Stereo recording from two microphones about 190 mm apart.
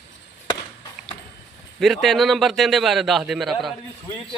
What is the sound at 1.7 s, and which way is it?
A man's voice, centre (ahead or behind).